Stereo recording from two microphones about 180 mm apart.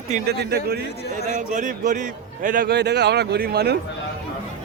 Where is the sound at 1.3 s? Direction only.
45° right (ahead or behind); by 3.7 s 60° right (ahead or behind).